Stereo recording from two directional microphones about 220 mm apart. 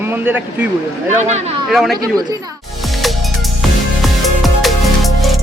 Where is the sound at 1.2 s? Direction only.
30° right (ahead or behind).